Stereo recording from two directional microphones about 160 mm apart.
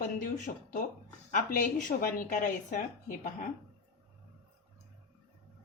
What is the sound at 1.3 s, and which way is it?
Speech, 55° left (ahead or behind).